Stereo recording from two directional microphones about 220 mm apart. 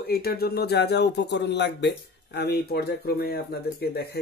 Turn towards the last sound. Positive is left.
turn(degrees=45)  # may be behind; listen again after turning